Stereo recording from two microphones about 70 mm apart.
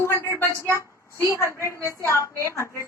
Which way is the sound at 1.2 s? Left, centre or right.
Left.